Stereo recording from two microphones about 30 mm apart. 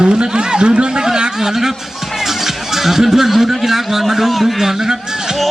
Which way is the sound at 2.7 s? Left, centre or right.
Centre.